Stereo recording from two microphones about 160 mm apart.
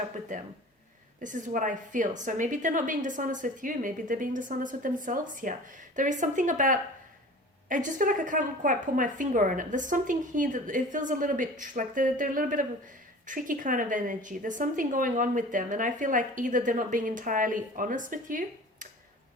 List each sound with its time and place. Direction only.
1.2 s a woman's voice: 55° right (ahead or behind)